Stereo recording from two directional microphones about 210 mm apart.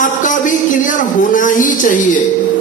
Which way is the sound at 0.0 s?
40° left (ahead or behind).